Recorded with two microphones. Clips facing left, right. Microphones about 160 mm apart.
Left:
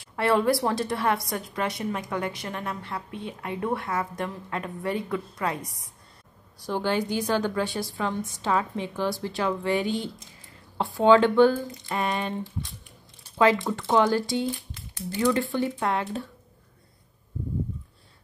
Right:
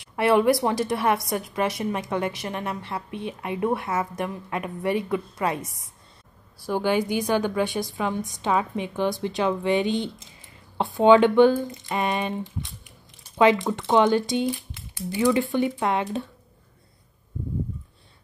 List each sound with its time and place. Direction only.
0.0 s a woman's voice: 20° right (ahead or behind)
6.6 s a woman's voice: 10° right (ahead or behind)
13.4 s a woman's voice: 20° right (ahead or behind)